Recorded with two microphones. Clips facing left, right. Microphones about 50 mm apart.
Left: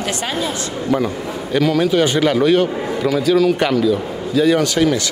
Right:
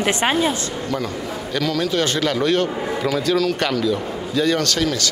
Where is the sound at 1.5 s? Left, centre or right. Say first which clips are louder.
Left 6 dB; centre.